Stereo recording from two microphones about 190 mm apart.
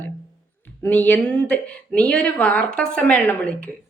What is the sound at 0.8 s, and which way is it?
Speech, 10° left (ahead or behind).